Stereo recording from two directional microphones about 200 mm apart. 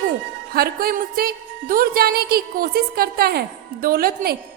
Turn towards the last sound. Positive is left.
turn(degrees=-50)  # may be behind; listen again after turning